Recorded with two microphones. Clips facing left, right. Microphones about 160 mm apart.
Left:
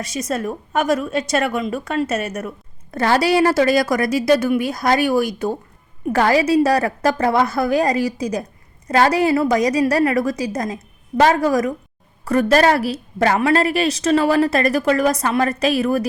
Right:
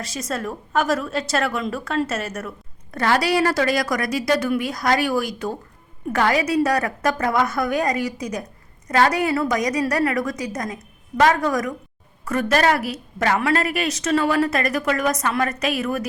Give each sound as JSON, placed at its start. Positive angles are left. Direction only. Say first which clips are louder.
{"t": 0.0, "sound": "a woman's voice", "louder": "left 4 dB", "side_deg": 20}